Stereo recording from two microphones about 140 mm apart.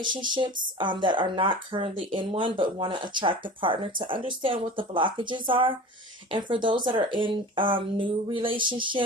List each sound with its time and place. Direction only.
0.0 s speech: 35° right (ahead or behind)